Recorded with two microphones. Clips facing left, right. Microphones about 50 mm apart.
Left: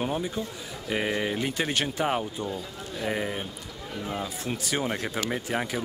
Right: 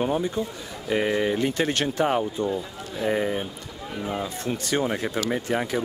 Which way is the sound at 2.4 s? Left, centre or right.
Centre.